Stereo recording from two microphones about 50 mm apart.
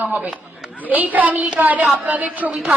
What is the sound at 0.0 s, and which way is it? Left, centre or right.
A woman's voice, right.